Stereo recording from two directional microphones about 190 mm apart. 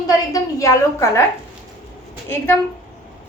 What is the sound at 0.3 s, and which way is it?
Speech, 15° left (ahead or behind).